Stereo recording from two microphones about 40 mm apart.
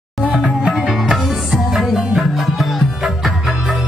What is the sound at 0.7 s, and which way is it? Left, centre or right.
Music, centre.